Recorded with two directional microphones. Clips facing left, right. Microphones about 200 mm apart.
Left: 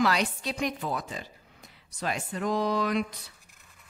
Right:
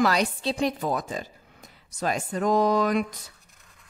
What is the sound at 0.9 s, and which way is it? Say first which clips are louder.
A woman's voice: right 5 dB; 45° right (ahead or behind).